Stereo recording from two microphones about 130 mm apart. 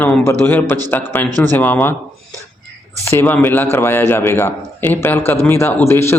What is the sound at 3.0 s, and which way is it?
A man's voice, 20° left (ahead or behind).